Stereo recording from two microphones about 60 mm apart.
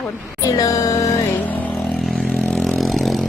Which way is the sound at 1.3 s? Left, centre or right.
Left.